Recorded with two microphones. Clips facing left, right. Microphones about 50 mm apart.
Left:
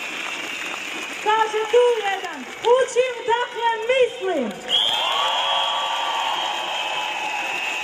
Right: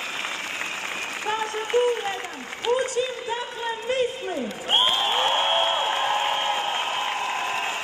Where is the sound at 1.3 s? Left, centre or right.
Left.